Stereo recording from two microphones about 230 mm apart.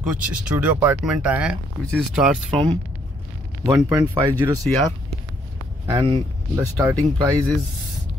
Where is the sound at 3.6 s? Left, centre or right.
Centre.